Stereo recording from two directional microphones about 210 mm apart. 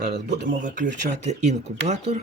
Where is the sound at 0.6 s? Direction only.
35° right (ahead or behind).